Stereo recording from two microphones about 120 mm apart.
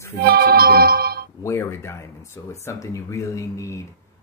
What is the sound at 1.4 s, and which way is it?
Speech, 20° left (ahead or behind).